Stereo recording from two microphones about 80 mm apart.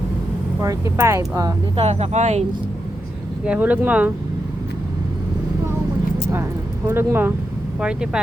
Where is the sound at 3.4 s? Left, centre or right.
Centre.